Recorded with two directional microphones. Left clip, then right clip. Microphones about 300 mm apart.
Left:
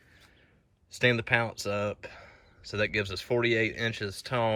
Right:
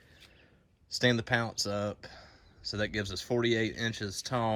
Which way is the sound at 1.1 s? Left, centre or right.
Centre.